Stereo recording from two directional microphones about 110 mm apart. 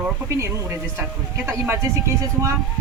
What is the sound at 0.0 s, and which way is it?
Speech, 25° right (ahead or behind).